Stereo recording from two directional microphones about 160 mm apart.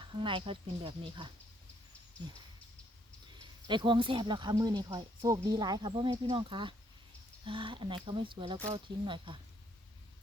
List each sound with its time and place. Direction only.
0.0 s speech: 30° right (ahead or behind)
3.7 s speech: 30° right (ahead or behind)